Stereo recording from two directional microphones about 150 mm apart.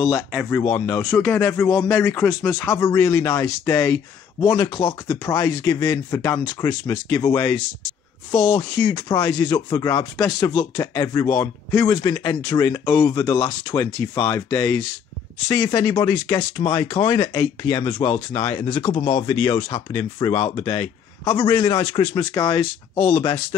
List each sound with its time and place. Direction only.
0.0 s speech: centre (ahead or behind)
0.6 s speech: 15° left (ahead or behind)
7.4 s speech: 5° left (ahead or behind)
8.7 s speech: 30° left (ahead or behind)
16.3 s speech: 10° left (ahead or behind)
17.0 s speech: 30° left (ahead or behind)
20.3 s speech: 35° left (ahead or behind)
22.9 s speech: 5° left (ahead or behind)